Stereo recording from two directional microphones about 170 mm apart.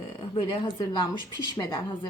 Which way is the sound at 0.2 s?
30° left (ahead or behind).